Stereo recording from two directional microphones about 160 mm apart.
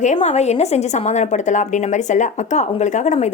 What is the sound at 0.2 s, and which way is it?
A woman's voice, 45° left (ahead or behind).